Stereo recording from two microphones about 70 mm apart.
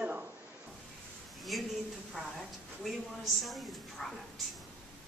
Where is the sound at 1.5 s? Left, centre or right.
Centre.